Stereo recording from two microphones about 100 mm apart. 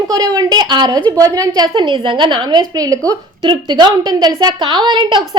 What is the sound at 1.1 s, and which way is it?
A woman's voice, 35° right (ahead or behind).